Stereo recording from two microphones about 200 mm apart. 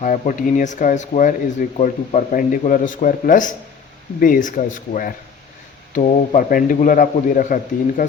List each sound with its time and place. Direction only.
0.0 s a man's voice: 40° left (ahead or behind)